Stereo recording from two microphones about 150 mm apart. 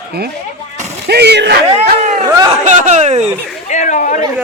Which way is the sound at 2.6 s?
50° right (ahead or behind).